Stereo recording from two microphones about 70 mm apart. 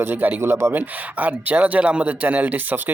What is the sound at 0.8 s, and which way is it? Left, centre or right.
Speech, right.